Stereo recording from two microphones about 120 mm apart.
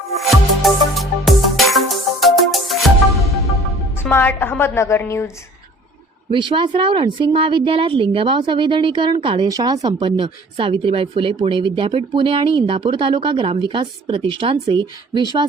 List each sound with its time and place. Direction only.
0.2 s music: centre (ahead or behind)
4.0 s a woman's voice: 15° left (ahead or behind)
6.3 s speech: 40° right (ahead or behind)
9.5 s speech: 30° right (ahead or behind)